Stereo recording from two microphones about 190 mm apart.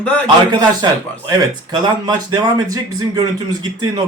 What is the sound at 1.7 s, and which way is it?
A man's voice, 20° right (ahead or behind).